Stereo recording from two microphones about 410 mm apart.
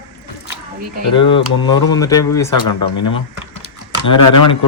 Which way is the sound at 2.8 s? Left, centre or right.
Left.